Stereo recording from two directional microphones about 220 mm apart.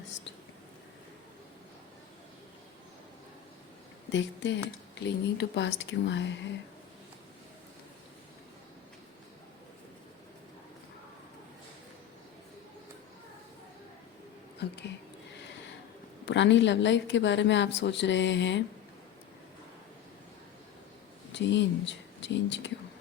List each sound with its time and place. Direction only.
4.1 s speech: 55° left (ahead or behind)
14.6 s speech: 50° left (ahead or behind)
16.2 s a woman's voice: 55° left (ahead or behind)
21.3 s speech: 55° left (ahead or behind)